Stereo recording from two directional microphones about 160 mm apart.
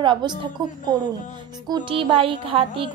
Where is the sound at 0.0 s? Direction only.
30° right (ahead or behind).